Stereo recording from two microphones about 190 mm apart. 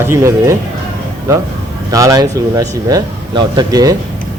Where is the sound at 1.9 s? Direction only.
20° right (ahead or behind).